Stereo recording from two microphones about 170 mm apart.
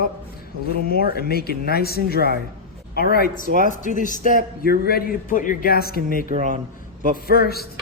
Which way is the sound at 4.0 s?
50° left (ahead or behind).